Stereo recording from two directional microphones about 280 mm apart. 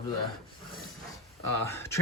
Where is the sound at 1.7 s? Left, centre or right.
Centre.